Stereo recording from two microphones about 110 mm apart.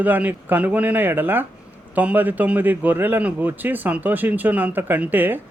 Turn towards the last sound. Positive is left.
turn(degrees=-15)  # may be behind; listen again after turning